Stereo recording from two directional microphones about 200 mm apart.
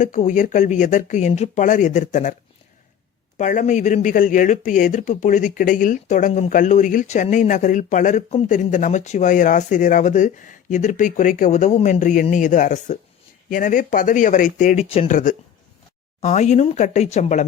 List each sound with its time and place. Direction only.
0.0 s speech: 35° left (ahead or behind)
3.3 s speech: 35° left (ahead or behind)